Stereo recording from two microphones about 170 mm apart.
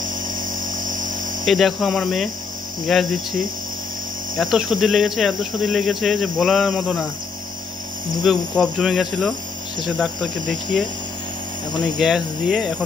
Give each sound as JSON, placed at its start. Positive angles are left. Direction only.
{"t": 0.7, "sound": "a sound", "side_deg": -50}
{"t": 1.4, "sound": "speech", "side_deg": 0}
{"t": 4.4, "sound": "speech", "side_deg": 0}
{"t": 8.3, "sound": "speech", "side_deg": 0}